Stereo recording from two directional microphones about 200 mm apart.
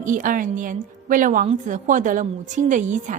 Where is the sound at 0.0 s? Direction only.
40° right (ahead or behind).